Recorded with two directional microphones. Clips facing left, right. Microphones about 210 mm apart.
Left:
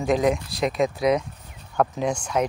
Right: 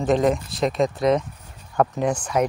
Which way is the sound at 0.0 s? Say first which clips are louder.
Right 2 dB; centre (ahead or behind).